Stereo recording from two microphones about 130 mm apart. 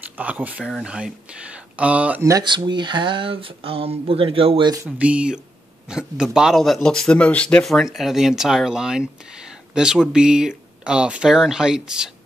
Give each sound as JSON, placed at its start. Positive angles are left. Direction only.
{"t": 0.2, "sound": "speech", "side_deg": -10}
{"t": 2.4, "sound": "speech", "side_deg": -35}
{"t": 4.8, "sound": "speech", "side_deg": -10}